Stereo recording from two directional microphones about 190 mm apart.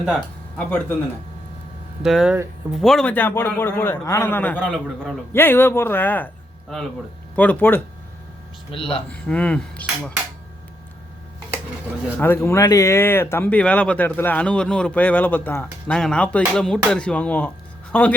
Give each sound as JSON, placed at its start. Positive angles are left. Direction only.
{"t": 0.0, "sound": "speech", "side_deg": 0}
{"t": 2.0, "sound": "speech", "side_deg": 0}
{"t": 8.7, "sound": "speech", "side_deg": 30}
{"t": 9.0, "sound": "speech", "side_deg": 5}
{"t": 12.1, "sound": "speech", "side_deg": 10}